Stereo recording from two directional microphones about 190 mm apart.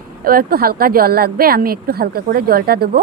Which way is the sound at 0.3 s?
50° right (ahead or behind).